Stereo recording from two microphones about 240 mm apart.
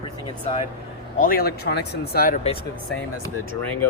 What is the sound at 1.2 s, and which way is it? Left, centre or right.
Speech, left.